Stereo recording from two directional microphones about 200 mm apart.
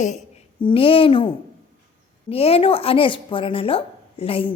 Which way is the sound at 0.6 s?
25° left (ahead or behind).